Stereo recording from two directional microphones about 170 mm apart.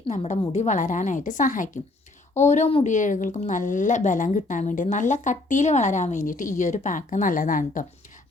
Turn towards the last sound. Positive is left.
turn(degrees=50)  # may be behind; listen again after turning